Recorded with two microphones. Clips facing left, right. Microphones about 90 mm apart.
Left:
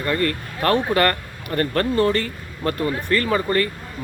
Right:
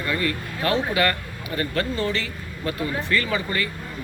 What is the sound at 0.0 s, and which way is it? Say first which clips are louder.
Speech: left 3 dB; 50° left (ahead or behind).